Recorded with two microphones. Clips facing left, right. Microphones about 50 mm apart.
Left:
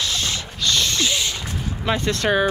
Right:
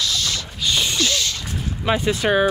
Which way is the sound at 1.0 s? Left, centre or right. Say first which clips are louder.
Right 1 dB; centre.